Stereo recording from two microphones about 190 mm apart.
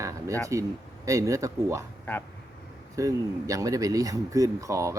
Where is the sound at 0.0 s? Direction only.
15° right (ahead or behind).